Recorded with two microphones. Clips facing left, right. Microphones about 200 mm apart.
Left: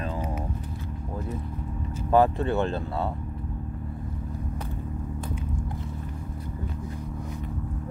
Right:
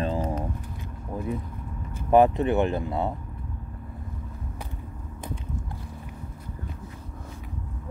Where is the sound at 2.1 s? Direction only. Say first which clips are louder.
Right 3 dB; 20° right (ahead or behind).